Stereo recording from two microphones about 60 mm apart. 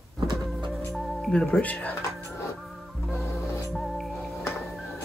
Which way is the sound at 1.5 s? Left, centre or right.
Left.